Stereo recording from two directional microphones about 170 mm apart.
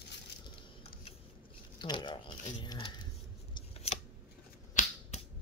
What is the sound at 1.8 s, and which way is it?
Speech, 25° left (ahead or behind).